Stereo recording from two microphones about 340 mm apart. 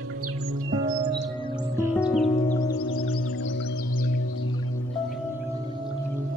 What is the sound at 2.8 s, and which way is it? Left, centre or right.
Music, left.